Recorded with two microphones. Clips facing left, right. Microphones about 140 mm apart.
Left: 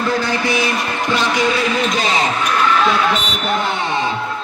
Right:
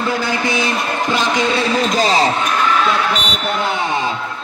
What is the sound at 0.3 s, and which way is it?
Speech, 20° right (ahead or behind).